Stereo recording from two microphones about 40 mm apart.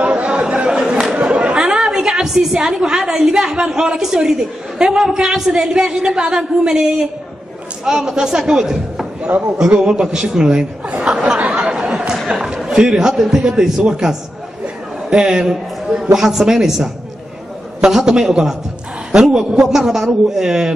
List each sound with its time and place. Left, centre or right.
0.0 s chatter: right
1.2 s a sound: right
1.6 s a woman's voice: centre
11.0 s chatter: right
12.6 s a man's voice: centre
17.9 s a woman's voice: centre